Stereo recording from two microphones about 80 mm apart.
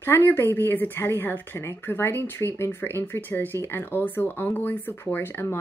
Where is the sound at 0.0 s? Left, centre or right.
Left.